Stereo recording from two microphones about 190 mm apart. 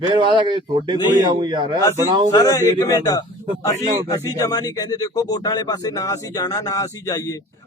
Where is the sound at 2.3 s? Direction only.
20° left (ahead or behind).